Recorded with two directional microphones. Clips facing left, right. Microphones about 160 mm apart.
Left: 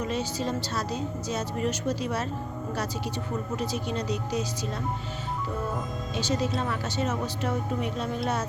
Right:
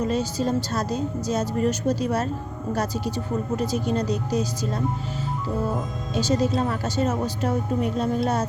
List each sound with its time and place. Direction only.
0.0 s speech: 40° right (ahead or behind)
3.6 s speech: 45° right (ahead or behind)
6.1 s speech: 40° right (ahead or behind)